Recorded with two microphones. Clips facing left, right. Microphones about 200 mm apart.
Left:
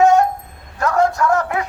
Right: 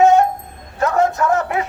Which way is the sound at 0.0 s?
25° right (ahead or behind).